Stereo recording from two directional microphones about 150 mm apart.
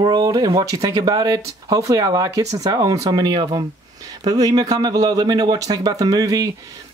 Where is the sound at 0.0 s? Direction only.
25° right (ahead or behind).